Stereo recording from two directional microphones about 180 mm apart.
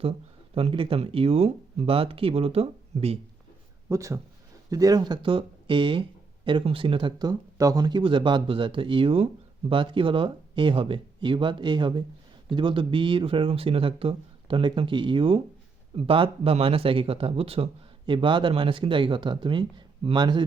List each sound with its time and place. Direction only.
0.5 s speech: 30° right (ahead or behind)
3.8 s speech: 15° right (ahead or behind)